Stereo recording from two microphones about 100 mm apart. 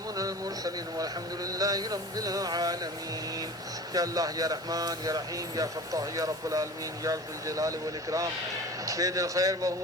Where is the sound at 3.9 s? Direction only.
40° right (ahead or behind).